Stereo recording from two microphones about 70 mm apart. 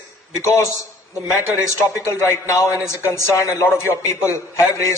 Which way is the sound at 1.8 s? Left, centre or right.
Left.